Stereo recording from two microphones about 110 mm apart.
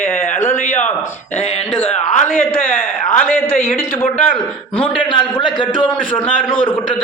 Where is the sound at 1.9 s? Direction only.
90° left.